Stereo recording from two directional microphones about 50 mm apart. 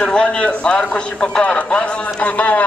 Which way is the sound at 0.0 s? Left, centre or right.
Centre.